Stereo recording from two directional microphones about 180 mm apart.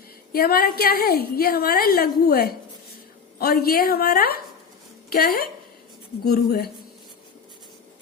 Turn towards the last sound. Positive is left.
turn(degrees=60)  # may be behind; listen again after turning